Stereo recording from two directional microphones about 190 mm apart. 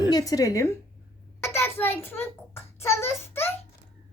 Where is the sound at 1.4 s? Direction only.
15° left (ahead or behind).